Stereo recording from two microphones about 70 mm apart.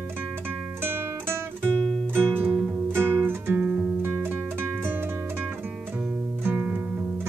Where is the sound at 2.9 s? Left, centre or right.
Right.